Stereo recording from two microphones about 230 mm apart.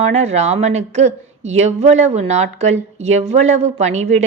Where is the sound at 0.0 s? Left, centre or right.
Right.